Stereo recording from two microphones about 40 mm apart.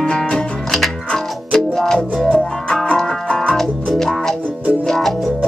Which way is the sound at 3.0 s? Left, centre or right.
Centre.